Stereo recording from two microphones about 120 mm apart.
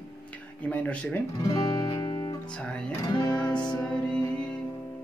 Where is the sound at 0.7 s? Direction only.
10° left (ahead or behind).